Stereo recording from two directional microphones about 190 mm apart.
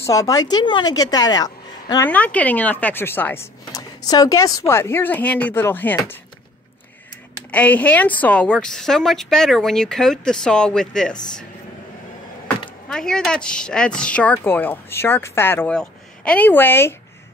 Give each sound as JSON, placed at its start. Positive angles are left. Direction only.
{"t": 0.0, "sound": "a woman's voice", "side_deg": 20}
{"t": 2.0, "sound": "speech", "side_deg": 10}
{"t": 7.5, "sound": "a woman's voice", "side_deg": 5}
{"t": 12.9, "sound": "speech", "side_deg": 5}